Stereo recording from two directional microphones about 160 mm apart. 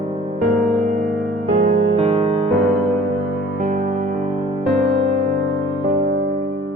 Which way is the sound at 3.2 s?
Centre (ahead or behind).